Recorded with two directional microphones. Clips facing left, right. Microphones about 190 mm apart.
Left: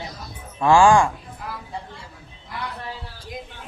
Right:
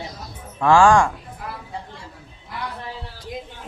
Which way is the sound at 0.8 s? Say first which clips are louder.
Even; 10° left (ahead or behind).